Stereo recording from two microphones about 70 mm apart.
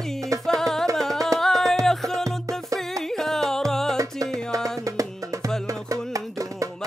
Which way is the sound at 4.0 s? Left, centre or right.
Right.